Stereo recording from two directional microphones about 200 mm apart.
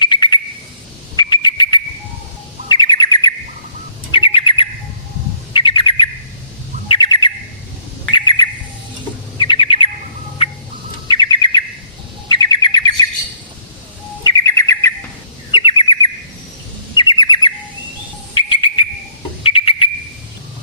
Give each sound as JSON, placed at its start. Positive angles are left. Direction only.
{"t": 0.0, "sound": "bird", "side_deg": 20}
{"t": 1.1, "sound": "a sound", "side_deg": 20}
{"t": 2.6, "sound": "bird", "side_deg": 20}
{"t": 11.1, "sound": "bird", "side_deg": 25}
{"t": 14.3, "sound": "bird", "side_deg": 15}
{"t": 15.5, "sound": "bird", "side_deg": 25}
{"t": 17.0, "sound": "bird", "side_deg": 20}